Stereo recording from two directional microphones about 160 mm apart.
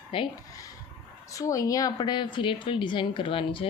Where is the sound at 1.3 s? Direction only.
20° left (ahead or behind).